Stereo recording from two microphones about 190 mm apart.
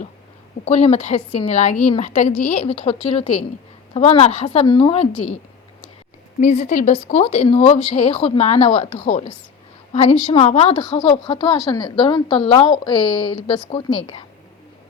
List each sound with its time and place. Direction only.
0.6 s a woman's voice: 35° left (ahead or behind)
6.4 s speech: 40° left (ahead or behind)
10.3 s a woman's voice: 35° left (ahead or behind)